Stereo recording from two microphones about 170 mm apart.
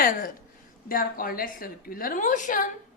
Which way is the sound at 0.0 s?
55° left (ahead or behind).